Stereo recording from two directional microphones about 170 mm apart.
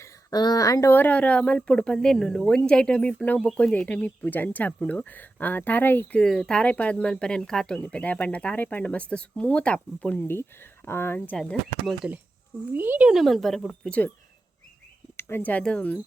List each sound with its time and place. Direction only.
0.0 s speech: 20° left (ahead or behind); by 11.9 s 5° left (ahead or behind)
12.7 s speech: 10° right (ahead or behind); by 14.1 s 5° left (ahead or behind)
15.1 s speech: 15° left (ahead or behind)